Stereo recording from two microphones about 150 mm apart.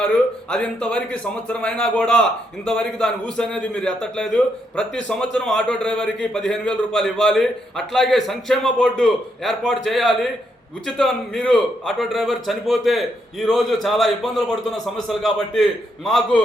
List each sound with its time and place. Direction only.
0.0 s a man's voice: 5° left (ahead or behind)